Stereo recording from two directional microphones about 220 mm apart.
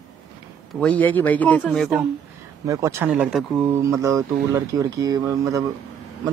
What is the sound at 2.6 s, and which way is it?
Speech, 15° right (ahead or behind).